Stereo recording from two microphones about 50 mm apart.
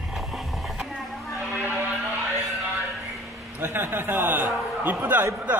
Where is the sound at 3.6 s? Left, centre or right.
Right.